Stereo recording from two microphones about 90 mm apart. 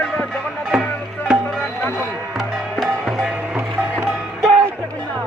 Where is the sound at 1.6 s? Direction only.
20° left (ahead or behind).